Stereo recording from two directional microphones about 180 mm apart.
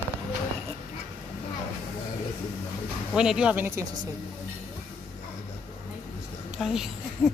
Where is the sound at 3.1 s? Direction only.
5° right (ahead or behind).